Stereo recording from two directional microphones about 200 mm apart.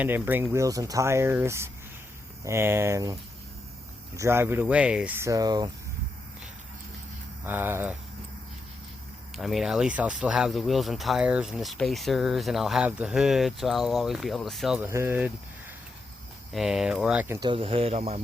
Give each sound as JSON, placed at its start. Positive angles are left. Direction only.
{"t": 0.0, "sound": "speech", "side_deg": -10}
{"t": 7.4, "sound": "speech", "side_deg": -10}
{"t": 9.3, "sound": "speech", "side_deg": 0}
{"t": 14.8, "sound": "speech", "side_deg": -10}
{"t": 16.5, "sound": "speech", "side_deg": 0}
{"t": 17.4, "sound": "speech", "side_deg": -25}